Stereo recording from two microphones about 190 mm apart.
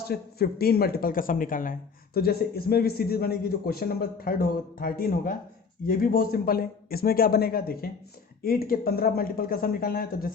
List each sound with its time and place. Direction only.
0.1 s a man's voice: 55° left (ahead or behind)